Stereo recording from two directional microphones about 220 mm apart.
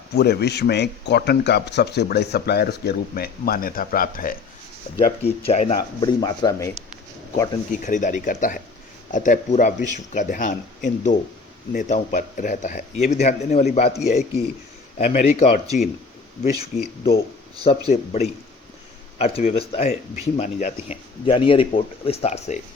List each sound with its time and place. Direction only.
0.2 s speech: 50° left (ahead or behind)
5.0 s speech: 25° left (ahead or behind)
7.7 s speech: 35° left (ahead or behind)
17.6 s speech: 25° left (ahead or behind)